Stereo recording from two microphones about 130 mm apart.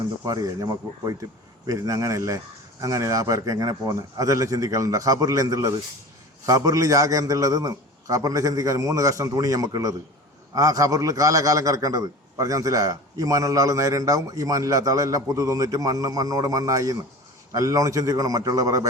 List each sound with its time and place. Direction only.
0.3 s a man's voice: 30° right (ahead or behind)